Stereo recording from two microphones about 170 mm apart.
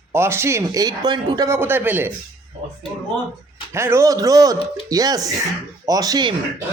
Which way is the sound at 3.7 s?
15° right (ahead or behind).